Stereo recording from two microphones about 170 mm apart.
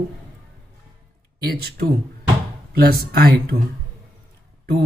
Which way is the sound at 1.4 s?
65° right (ahead or behind).